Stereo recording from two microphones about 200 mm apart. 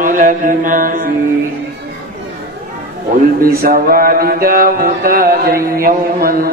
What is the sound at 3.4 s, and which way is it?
Mantra, 45° right (ahead or behind).